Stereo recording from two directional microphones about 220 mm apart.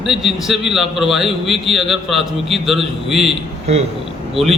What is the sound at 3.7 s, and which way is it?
Speech, 30° right (ahead or behind).